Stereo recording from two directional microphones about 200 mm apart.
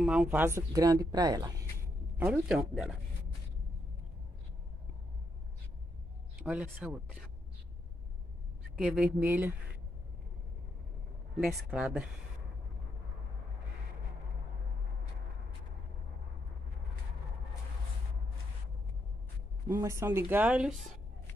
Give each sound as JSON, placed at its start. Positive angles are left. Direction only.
{"t": 0.0, "sound": "speech", "side_deg": -5}
{"t": 6.4, "sound": "speech", "side_deg": -5}
{"t": 8.7, "sound": "speech", "side_deg": -5}
{"t": 11.7, "sound": "speech", "side_deg": -5}
{"t": 19.7, "sound": "speech", "side_deg": -15}